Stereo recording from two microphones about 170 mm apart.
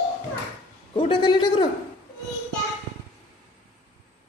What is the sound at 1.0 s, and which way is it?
Speech, 25° left (ahead or behind).